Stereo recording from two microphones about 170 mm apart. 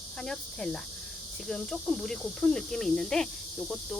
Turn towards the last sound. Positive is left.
turn(degrees=0)  # may be behind; listen again after turning